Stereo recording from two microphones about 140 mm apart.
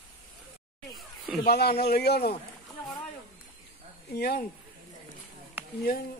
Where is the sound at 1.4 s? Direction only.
90° left.